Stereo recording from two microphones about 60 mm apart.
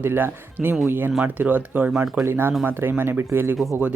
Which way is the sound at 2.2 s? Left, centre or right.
Right.